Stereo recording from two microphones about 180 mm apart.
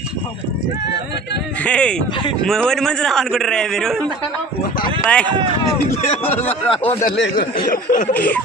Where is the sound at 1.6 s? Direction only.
5° left (ahead or behind).